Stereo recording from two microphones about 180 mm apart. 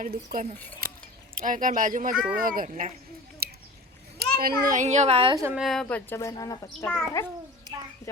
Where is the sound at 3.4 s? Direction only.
60° right (ahead or behind).